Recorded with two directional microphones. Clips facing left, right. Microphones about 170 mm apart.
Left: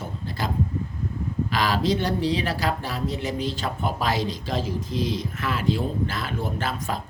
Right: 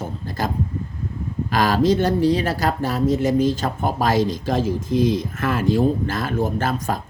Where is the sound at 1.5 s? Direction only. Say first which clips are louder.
Right 7 dB; 45° right (ahead or behind).